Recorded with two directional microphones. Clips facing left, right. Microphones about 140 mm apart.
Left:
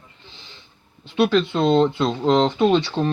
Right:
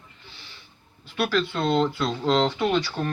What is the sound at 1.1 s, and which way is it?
Speech, 25° left (ahead or behind).